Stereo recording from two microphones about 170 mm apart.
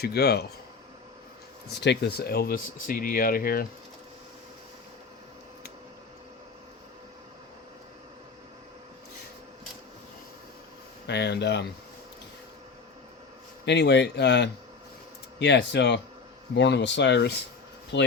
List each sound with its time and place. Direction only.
0.0 s speech: 70° left (ahead or behind)
1.8 s speech: 85° left; by 3.7 s 60° left (ahead or behind)
11.0 s speech: 80° left
13.7 s speech: 90° left